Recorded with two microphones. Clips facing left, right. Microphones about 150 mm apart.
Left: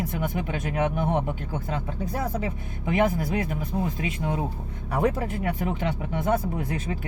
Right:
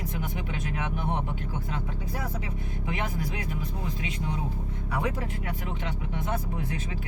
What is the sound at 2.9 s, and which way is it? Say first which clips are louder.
Speech: left 10 dB; 50° left (ahead or behind).